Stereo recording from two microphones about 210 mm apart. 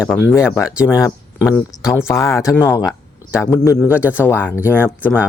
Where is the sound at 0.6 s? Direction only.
5° right (ahead or behind).